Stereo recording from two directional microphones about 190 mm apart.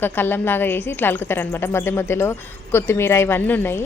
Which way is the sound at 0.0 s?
10° left (ahead or behind).